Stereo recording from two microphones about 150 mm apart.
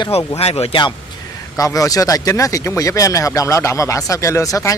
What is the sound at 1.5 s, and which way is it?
Speech, 20° left (ahead or behind).